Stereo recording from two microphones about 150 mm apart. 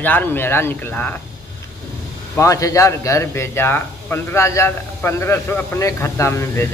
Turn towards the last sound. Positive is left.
turn(degrees=15)  # may be behind; listen again after turning